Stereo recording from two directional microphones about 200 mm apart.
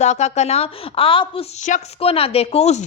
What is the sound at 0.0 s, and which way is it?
A woman's voice, 35° left (ahead or behind).